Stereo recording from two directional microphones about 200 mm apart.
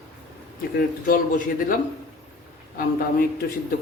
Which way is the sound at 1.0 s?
45° left (ahead or behind).